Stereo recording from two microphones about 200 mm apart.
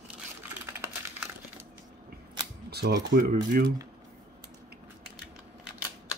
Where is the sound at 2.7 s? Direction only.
55° right (ahead or behind).